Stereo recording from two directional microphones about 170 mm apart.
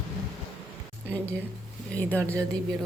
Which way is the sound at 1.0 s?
10° left (ahead or behind).